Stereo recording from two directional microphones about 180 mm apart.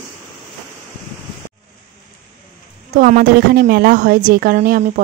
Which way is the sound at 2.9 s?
50° right (ahead or behind).